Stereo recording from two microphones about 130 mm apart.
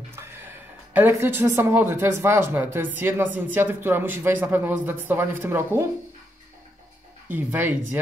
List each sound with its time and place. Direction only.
0.1 s speech: 15° right (ahead or behind)
7.2 s speech: 15° right (ahead or behind)